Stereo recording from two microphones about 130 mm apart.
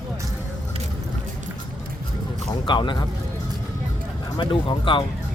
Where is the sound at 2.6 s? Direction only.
40° left (ahead or behind).